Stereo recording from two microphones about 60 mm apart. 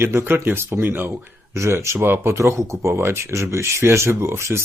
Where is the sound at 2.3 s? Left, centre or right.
Right.